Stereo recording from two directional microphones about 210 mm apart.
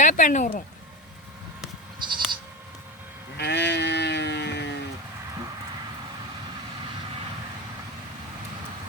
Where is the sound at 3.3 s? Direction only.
55° left (ahead or behind).